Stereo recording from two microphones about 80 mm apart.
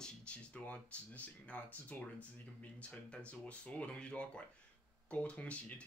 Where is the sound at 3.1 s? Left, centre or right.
Centre.